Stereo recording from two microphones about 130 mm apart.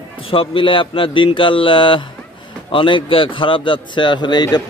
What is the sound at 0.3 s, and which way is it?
A man's voice, 45° left (ahead or behind).